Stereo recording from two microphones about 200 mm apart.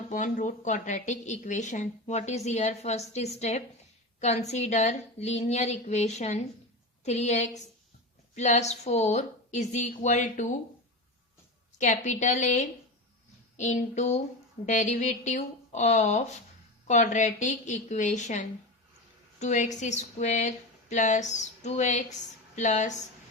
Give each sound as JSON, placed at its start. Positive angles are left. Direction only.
{"t": 0.1, "sound": "a woman's voice", "side_deg": 40}
{"t": 11.8, "sound": "a woman's voice", "side_deg": 35}